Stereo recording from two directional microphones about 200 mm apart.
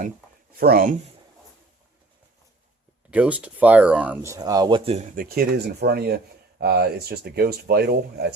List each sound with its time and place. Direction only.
0.6 s speech: 45° right (ahead or behind)
3.1 s speech: 5° right (ahead or behind)
4.9 s speech: 40° right (ahead or behind)